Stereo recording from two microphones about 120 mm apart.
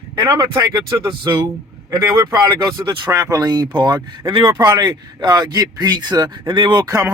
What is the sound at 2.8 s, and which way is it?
Speech, 40° right (ahead or behind).